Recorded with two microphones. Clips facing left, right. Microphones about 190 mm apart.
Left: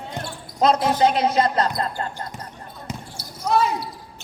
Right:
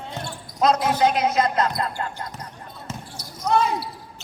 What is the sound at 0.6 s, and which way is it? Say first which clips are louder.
A man's voice: left 1 dB; 30° left (ahead or behind).